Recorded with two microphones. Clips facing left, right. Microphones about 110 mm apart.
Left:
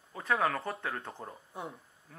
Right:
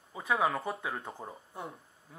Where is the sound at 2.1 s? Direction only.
10° right (ahead or behind).